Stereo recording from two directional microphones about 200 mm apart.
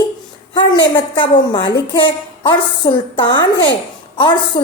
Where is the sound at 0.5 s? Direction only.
20° left (ahead or behind).